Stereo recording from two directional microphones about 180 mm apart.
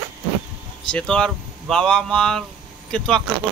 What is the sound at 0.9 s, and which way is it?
Speech, 5° left (ahead or behind).